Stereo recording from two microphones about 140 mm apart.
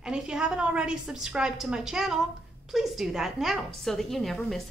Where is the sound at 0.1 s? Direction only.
5° right (ahead or behind).